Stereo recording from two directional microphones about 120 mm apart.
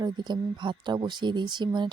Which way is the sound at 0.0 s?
40° right (ahead or behind).